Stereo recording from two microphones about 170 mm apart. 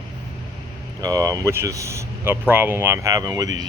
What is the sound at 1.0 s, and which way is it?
Speech, 20° right (ahead or behind).